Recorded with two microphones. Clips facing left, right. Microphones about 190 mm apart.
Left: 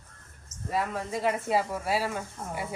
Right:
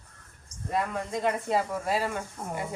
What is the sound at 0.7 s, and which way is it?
Speech, 5° left (ahead or behind).